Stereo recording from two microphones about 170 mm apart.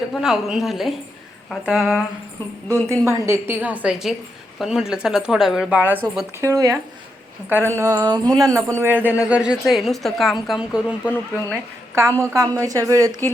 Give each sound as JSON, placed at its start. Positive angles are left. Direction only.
{"t": 0.1, "sound": "speech", "side_deg": -5}
{"t": 2.8, "sound": "speech", "side_deg": -15}
{"t": 11.1, "sound": "speech", "side_deg": 10}
{"t": 11.9, "sound": "speech", "side_deg": -15}